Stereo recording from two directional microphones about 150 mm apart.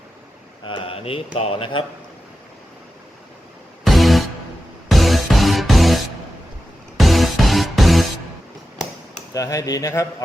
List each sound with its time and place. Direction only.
0.7 s speech: 35° left (ahead or behind)
3.8 s music: centre (ahead or behind)
9.3 s a man's voice: 20° left (ahead or behind)